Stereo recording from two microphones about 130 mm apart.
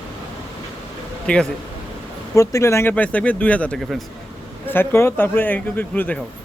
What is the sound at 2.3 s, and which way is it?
Speech, 25° left (ahead or behind).